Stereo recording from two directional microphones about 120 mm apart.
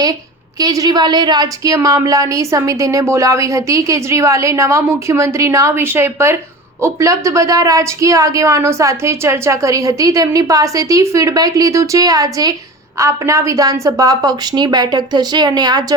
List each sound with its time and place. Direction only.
0.6 s a woman's voice: 30° right (ahead or behind)